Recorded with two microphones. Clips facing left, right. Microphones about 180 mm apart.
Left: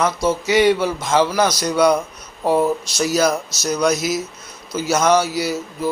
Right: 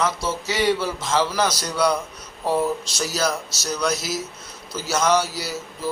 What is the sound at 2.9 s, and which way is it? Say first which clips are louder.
A man's voice: left 7 dB; 15° left (ahead or behind).